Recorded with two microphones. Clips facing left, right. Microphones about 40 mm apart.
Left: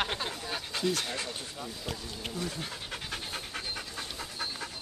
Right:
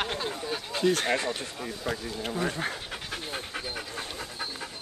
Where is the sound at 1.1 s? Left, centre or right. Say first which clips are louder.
Right 7 dB; right.